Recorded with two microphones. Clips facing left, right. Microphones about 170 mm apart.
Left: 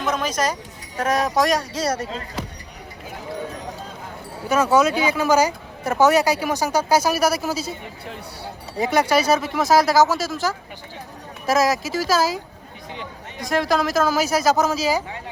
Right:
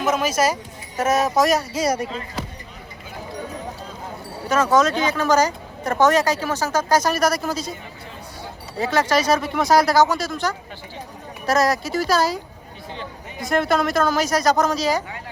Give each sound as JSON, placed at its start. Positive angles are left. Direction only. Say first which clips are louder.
{"t": 0.0, "sound": "speech", "louder": "right 3 dB", "side_deg": -10}
{"t": 4.4, "sound": "speech", "louder": "even", "side_deg": 10}
{"t": 8.8, "sound": "speech", "louder": "left 1 dB", "side_deg": 15}
{"t": 13.4, "sound": "speech", "louder": "right 1 dB", "side_deg": 0}